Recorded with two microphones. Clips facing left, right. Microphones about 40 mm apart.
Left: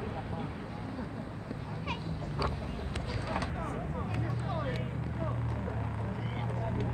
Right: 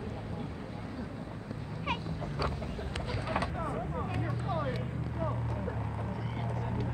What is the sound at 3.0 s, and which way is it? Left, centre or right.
Vehicle, right.